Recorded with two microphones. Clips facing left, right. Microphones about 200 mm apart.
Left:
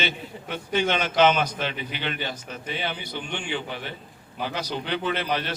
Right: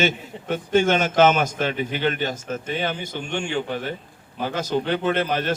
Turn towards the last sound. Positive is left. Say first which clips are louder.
# right 5 dB
turn(degrees=-45)  # may be behind; listen again after turning